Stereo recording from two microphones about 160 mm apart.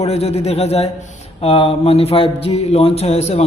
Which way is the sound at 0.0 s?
40° left (ahead or behind).